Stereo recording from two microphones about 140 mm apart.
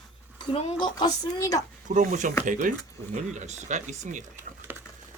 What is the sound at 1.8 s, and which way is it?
Speech, 65° right (ahead or behind).